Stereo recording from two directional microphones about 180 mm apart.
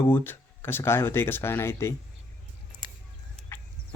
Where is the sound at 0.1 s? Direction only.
10° left (ahead or behind).